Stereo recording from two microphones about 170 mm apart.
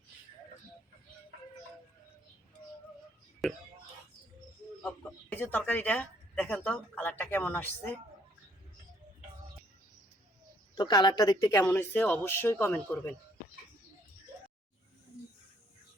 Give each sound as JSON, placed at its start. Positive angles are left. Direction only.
{"t": 3.4, "sound": "speech", "side_deg": 0}
{"t": 4.8, "sound": "speech", "side_deg": 10}
{"t": 10.8, "sound": "a woman's voice", "side_deg": 25}
{"t": 11.6, "sound": "speech", "side_deg": 10}